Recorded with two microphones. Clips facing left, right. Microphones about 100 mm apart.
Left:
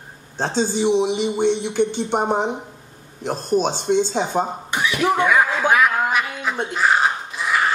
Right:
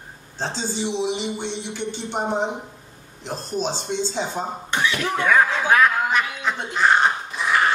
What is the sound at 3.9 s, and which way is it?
Speech, 55° left (ahead or behind).